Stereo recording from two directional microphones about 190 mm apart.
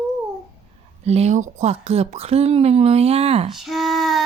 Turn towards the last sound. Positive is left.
turn(degrees=0)  # may be behind; listen again after turning